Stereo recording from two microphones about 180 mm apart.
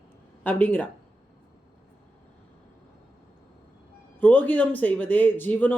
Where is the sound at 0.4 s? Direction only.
10° left (ahead or behind).